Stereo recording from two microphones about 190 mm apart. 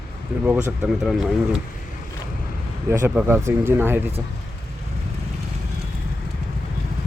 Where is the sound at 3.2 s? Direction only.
15° right (ahead or behind).